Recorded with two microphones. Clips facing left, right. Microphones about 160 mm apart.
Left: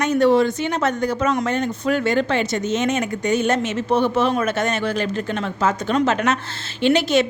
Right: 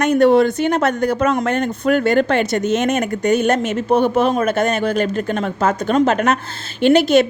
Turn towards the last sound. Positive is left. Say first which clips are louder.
# right 5 dB
turn(degrees=-55)  # may be behind; listen again after turning